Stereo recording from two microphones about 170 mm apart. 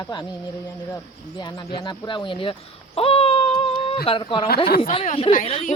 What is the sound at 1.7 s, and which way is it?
Speech, 30° left (ahead or behind).